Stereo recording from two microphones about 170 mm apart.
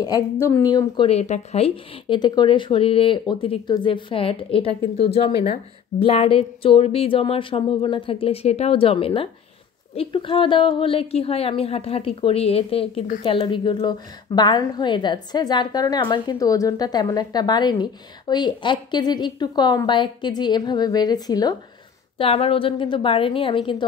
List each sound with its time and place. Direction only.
0.0 s a woman's voice: 20° left (ahead or behind)
1.0 s a woman's voice: 40° left (ahead or behind); by 21.5 s 25° left (ahead or behind)
22.2 s a woman's voice: 35° left (ahead or behind)